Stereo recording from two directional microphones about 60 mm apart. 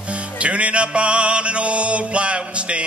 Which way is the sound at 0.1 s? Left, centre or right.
Right.